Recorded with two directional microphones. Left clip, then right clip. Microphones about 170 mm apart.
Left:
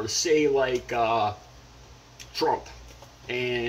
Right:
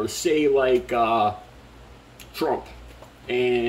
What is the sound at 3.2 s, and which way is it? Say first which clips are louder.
Speech: right 6 dB; 15° right (ahead or behind).